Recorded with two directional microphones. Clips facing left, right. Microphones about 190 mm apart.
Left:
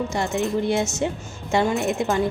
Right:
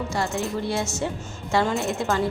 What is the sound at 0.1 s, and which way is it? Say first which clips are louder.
Speech: left 3 dB; 20° left (ahead or behind).